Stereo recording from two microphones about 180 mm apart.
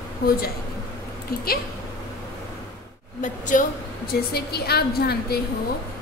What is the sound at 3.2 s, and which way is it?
A woman's voice, 45° left (ahead or behind).